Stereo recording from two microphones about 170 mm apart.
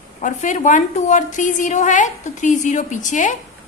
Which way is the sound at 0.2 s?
45° left (ahead or behind).